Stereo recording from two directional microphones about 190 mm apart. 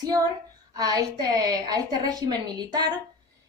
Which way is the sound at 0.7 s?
20° right (ahead or behind).